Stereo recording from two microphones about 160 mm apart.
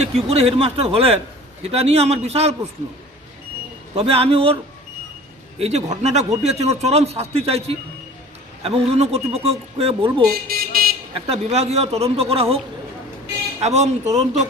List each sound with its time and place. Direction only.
0.0 s speech: 40° right (ahead or behind)
3.9 s speech: 40° right (ahead or behind)
5.5 s speech: 40° right (ahead or behind)
10.3 s car alarm: 75° right (ahead or behind)
11.1 s speech: 40° right (ahead or behind)
13.6 s speech: 45° right (ahead or behind)